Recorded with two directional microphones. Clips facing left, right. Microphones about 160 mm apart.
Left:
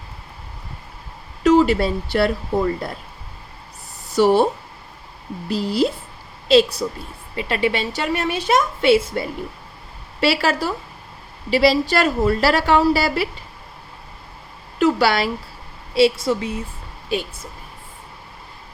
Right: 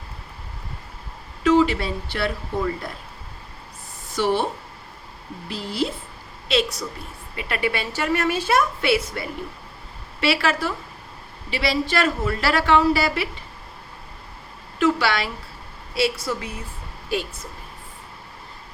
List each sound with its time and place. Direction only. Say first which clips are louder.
1.5 s a woman's voice: left 3 dB; 40° left (ahead or behind)
4.1 s a woman's voice: left 7 dB; 40° left (ahead or behind)
5.5 s a woman's voice: left 7 dB; 35° left (ahead or behind)
10.2 s a woman's voice: left 3 dB; 35° left (ahead or behind)
14.8 s a sound: left 4 dB; 40° left (ahead or behind)
16.0 s speech: left 7 dB; 25° left (ahead or behind)